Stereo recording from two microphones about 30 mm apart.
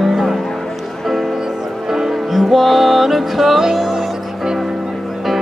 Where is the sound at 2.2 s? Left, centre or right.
Centre.